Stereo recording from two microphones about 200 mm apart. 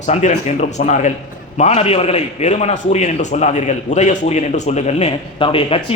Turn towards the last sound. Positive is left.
turn(degrees=25)  # may be behind; listen again after turning